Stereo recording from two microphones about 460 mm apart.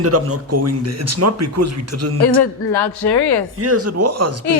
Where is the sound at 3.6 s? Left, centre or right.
Right.